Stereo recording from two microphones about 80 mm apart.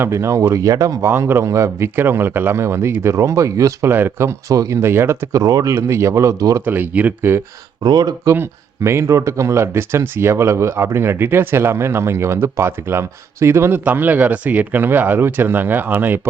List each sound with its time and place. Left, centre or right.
0.0 s speech: right
3.8 s speech: right
4.8 s speech: right
5.3 s speech: right
6.7 s speech: right
7.9 s speech: right
8.2 s speech: right